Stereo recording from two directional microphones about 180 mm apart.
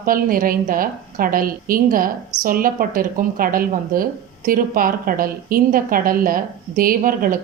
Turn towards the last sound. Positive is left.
turn(degrees=-50)  # may be behind; listen again after turning